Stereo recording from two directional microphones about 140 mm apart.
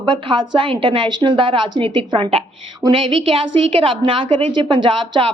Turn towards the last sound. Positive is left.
turn(degrees=-35)  # may be behind; listen again after turning